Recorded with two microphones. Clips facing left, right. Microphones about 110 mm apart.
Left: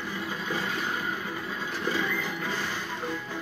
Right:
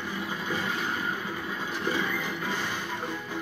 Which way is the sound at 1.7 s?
15° right (ahead or behind).